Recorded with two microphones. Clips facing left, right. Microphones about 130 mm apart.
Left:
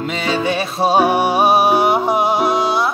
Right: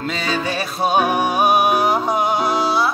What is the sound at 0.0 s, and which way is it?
Music, 20° left (ahead or behind).